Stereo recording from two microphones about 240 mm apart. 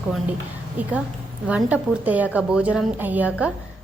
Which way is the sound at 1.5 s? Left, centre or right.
Centre.